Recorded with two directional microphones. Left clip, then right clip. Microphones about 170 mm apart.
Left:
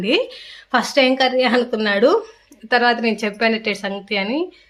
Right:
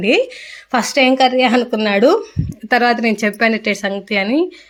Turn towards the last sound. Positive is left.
turn(degrees=-25)  # may be behind; listen again after turning